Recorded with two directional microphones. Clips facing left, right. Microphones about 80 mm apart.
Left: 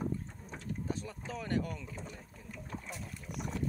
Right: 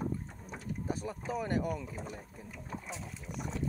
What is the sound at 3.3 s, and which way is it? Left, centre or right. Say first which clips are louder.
Speech: even; centre.